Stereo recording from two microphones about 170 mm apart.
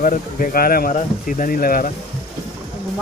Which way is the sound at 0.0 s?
55° left (ahead or behind).